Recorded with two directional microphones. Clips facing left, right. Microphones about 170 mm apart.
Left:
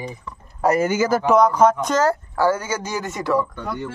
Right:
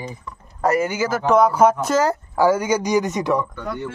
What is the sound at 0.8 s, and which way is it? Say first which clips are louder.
Speech: left 3 dB; 45° left (ahead or behind).